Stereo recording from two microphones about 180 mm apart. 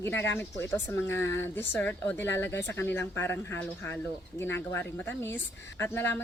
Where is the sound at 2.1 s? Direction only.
80° left.